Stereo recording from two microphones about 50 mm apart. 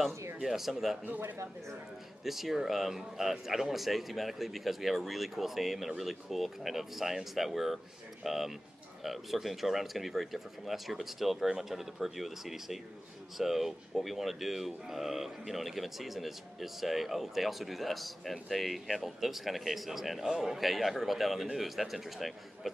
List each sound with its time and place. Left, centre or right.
0.1 s a sound: right
0.4 s speech: centre
1.0 s speech: right
2.2 s speech: centre